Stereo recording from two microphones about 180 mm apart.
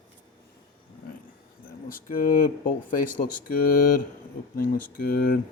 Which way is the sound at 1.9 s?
55° left (ahead or behind).